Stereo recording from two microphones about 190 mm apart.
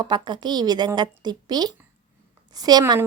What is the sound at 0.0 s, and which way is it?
Speech, 25° right (ahead or behind).